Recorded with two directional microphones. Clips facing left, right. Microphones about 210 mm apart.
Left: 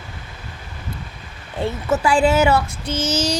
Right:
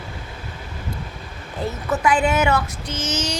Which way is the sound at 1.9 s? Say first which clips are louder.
Left 3 dB; 25° left (ahead or behind).